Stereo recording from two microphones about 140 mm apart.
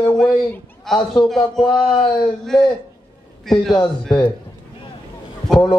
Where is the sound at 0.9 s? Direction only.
35° left (ahead or behind).